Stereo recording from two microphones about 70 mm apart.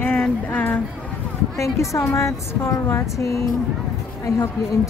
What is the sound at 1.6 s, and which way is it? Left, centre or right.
A woman's voice, left.